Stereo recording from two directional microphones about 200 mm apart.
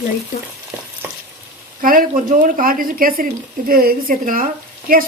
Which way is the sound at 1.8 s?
45° right (ahead or behind).